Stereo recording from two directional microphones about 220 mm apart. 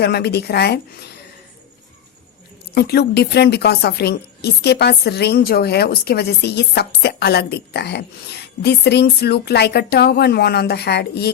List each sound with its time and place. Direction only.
0.0 s a woman's voice: 50° left (ahead or behind)
2.7 s a woman's voice: 45° left (ahead or behind)